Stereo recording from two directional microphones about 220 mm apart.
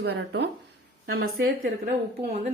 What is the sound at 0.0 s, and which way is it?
A woman's voice, 50° right (ahead or behind).